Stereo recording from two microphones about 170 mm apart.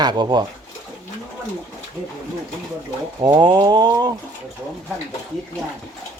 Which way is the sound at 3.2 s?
25° right (ahead or behind).